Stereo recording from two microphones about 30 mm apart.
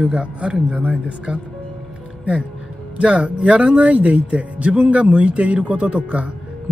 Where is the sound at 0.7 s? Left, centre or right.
Right.